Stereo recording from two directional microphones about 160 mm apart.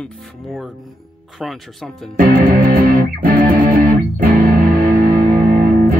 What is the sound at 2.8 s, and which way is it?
Music, 60° right (ahead or behind).